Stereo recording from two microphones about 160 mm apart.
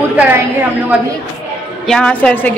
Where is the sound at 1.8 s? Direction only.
5° left (ahead or behind).